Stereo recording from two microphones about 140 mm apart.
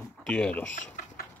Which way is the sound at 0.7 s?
70° left (ahead or behind).